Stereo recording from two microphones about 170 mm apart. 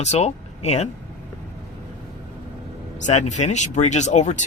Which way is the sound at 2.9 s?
45° left (ahead or behind).